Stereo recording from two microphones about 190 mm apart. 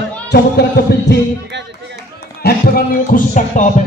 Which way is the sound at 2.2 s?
55° left (ahead or behind).